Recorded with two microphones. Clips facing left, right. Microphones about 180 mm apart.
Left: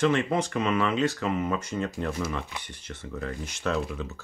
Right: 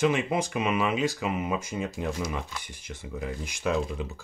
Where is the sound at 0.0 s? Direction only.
10° right (ahead or behind).